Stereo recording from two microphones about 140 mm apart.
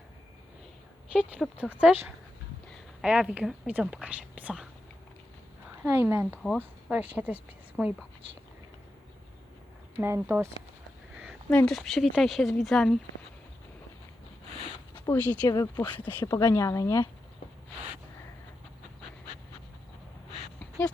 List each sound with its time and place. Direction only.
1.1 s speech: 10° right (ahead or behind)
5.8 s speech: 15° right (ahead or behind)
6.4 s speech: 5° left (ahead or behind)
6.9 s speech: 10° right (ahead or behind)
10.0 s speech: 15° right (ahead or behind)
11.5 s speech: 5° left (ahead or behind)
15.0 s speech: 15° left (ahead or behind)